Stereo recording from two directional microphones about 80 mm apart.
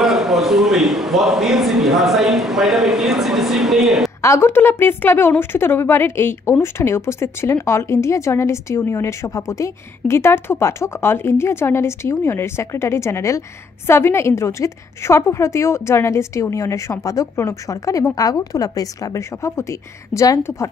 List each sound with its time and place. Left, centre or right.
0.0 s a man's voice: centre
4.2 s a woman's voice: left